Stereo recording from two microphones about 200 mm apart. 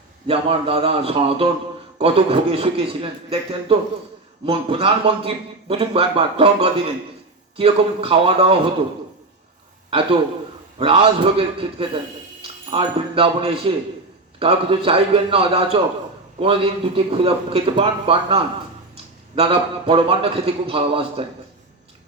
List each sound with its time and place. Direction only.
0.3 s a man's voice: 30° right (ahead or behind)
10.8 s a man's voice: 30° right (ahead or behind)